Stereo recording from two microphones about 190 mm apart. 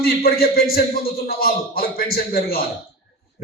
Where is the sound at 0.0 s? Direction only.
55° left (ahead or behind).